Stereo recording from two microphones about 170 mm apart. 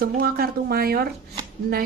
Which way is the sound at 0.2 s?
60° right (ahead or behind).